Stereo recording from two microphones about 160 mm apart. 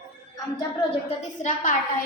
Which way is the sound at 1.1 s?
50° left (ahead or behind).